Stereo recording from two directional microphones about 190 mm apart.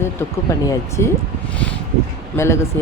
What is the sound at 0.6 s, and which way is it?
Speech, 15° left (ahead or behind).